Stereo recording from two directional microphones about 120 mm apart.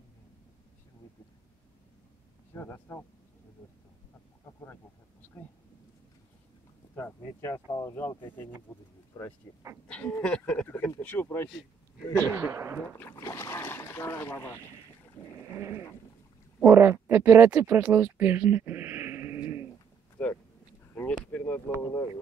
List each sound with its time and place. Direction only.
2.5 s speech: 20° left (ahead or behind)
7.0 s speech: 20° left (ahead or behind)
9.1 s speech: 35° left (ahead or behind)
9.8 s speech: 10° left (ahead or behind)
12.2 s a man's voice: 15° right (ahead or behind)
12.9 s speech: 20° left (ahead or behind)
15.5 s a sound: 20° right (ahead or behind)
16.6 s speech: 20° right (ahead or behind)
20.9 s a sound: 15° left (ahead or behind)